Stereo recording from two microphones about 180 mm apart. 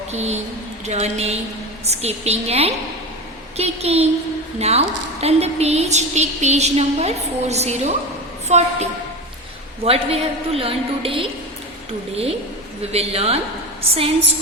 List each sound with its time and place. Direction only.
0.1 s a woman's voice: 40° right (ahead or behind)